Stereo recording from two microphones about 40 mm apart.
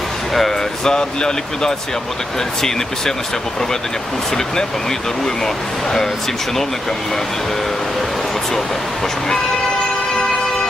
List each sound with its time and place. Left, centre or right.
0.9 s speech: centre
4.4 s speech: centre